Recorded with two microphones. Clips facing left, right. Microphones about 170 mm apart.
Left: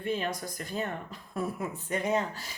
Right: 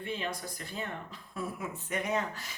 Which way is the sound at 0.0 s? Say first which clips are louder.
Left 5 dB; 45° left (ahead or behind).